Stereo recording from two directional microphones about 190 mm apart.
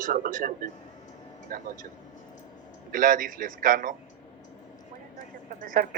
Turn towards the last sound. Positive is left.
turn(degrees=-45)  # may be behind; listen again after turning